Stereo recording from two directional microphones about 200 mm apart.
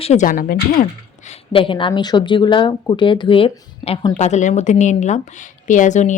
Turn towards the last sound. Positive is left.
turn(degrees=40)  # may be behind; listen again after turning